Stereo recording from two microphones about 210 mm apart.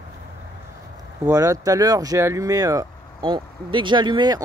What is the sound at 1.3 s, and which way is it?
Speech, 15° right (ahead or behind).